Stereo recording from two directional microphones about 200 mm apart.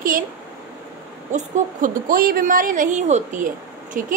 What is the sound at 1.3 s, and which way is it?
A woman's voice, 40° right (ahead or behind).